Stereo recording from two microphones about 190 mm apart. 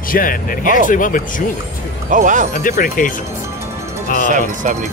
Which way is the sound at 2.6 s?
45° left (ahead or behind).